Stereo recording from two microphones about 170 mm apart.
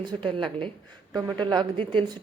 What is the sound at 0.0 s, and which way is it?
Speech, 25° right (ahead or behind).